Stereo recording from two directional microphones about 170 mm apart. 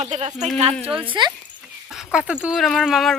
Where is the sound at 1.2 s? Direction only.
25° right (ahead or behind).